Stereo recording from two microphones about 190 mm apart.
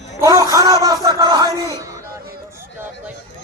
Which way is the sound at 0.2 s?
15° right (ahead or behind).